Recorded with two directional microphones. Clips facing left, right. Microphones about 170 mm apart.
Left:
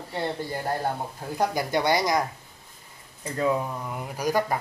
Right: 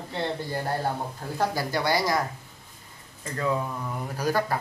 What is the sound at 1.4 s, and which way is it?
Speech, 20° left (ahead or behind).